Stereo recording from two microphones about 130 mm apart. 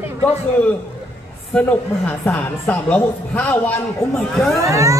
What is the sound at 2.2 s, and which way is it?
A man's voice, 15° left (ahead or behind).